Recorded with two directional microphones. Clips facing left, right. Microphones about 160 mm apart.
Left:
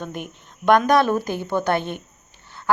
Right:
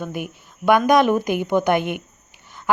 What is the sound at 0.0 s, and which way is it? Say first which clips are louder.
A woman's voice: right 3 dB; 10° right (ahead or behind).